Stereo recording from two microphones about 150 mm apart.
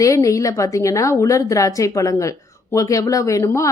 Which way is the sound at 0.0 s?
20° left (ahead or behind).